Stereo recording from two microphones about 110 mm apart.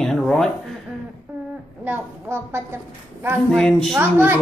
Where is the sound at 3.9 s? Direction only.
20° right (ahead or behind).